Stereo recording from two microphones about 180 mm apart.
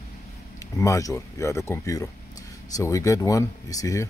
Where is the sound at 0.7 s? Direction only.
20° left (ahead or behind).